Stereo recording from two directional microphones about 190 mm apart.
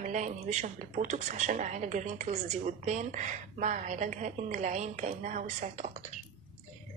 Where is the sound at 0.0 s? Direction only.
40° right (ahead or behind).